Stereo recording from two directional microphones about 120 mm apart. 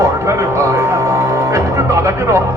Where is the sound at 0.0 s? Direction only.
25° right (ahead or behind).